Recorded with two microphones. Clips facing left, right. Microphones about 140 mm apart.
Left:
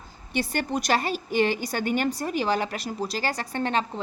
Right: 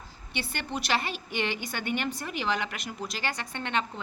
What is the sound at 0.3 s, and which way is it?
A woman's voice, 40° left (ahead or behind).